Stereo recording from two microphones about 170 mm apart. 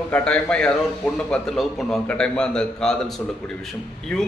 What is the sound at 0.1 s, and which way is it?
A man's voice, 5° left (ahead or behind).